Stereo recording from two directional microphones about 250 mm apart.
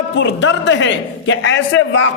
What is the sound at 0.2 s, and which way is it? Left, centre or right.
A man's voice, left.